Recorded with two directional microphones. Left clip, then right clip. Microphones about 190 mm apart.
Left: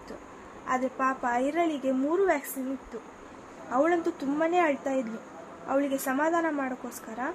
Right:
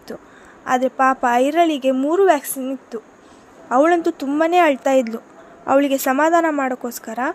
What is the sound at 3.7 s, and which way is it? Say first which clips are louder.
A woman's voice: right 10 dB; 50° right (ahead or behind).